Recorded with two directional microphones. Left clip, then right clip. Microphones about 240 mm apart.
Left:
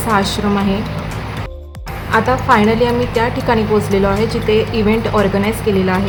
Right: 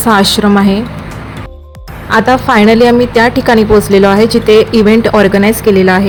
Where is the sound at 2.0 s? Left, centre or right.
Right.